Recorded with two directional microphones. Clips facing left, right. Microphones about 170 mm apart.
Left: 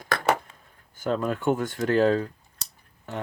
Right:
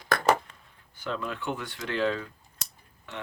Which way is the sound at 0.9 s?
45° left (ahead or behind).